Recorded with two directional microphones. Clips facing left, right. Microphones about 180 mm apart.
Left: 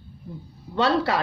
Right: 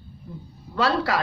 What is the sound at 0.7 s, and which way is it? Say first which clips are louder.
Speech: left 1 dB; 25° left (ahead or behind).